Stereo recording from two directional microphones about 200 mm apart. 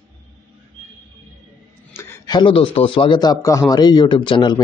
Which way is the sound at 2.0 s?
15° left (ahead or behind).